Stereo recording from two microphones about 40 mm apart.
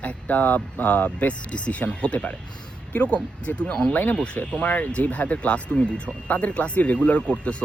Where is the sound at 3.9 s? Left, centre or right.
Left.